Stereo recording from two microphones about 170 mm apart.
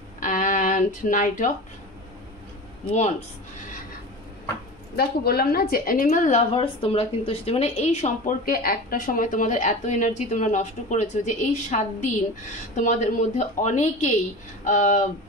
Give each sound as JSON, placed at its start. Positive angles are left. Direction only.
{"t": 0.2, "sound": "music", "side_deg": 50}
{"t": 4.9, "sound": "a woman's voice", "side_deg": 65}
{"t": 8.5, "sound": "a woman's voice", "side_deg": 60}